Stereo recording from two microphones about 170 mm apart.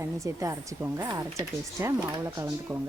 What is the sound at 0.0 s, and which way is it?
Speech, 20° right (ahead or behind).